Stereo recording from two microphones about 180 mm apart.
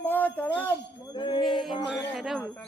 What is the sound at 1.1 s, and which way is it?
Music, 25° left (ahead or behind).